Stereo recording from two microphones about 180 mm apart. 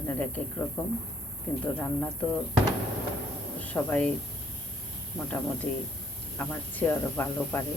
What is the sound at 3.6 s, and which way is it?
Speech, 10° left (ahead or behind).